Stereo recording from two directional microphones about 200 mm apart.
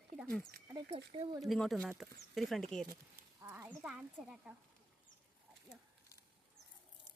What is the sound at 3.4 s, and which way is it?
Speech, 10° right (ahead or behind).